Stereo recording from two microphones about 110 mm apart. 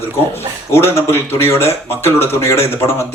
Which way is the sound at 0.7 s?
20° left (ahead or behind).